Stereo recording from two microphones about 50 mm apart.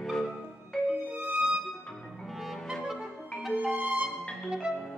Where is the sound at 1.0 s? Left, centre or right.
Right.